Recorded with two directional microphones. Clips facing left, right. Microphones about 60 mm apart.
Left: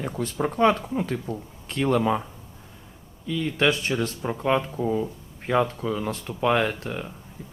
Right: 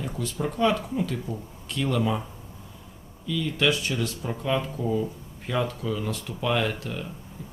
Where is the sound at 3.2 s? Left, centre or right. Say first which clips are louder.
Left 2 dB; left.